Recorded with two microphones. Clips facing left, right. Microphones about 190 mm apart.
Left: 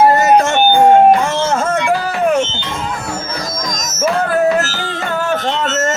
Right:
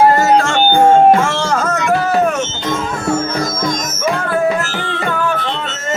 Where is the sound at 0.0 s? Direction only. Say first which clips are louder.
Left 1 dB; 20° left (ahead or behind).